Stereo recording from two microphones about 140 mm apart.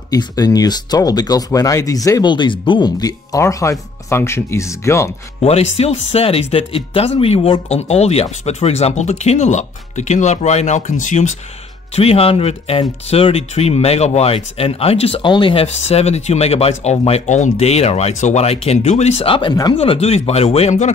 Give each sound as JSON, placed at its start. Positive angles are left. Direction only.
{"t": 0.1, "sound": "speech", "side_deg": 25}
{"t": 5.4, "sound": "speech", "side_deg": 45}
{"t": 11.9, "sound": "speech", "side_deg": 45}